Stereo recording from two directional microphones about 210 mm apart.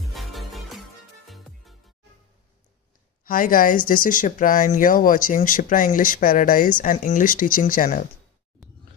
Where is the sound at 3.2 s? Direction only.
40° left (ahead or behind).